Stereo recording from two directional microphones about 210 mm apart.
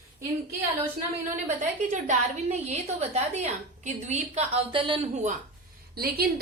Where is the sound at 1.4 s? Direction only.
35° right (ahead or behind).